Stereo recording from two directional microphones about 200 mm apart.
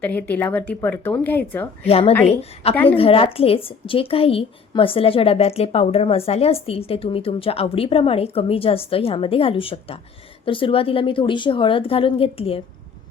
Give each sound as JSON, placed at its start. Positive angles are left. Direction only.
{"t": 0.0, "sound": "speech", "side_deg": 10}
{"t": 1.9, "sound": "a woman's voice", "side_deg": 30}
{"t": 2.7, "sound": "speech", "side_deg": 10}
{"t": 3.0, "sound": "speech", "side_deg": 30}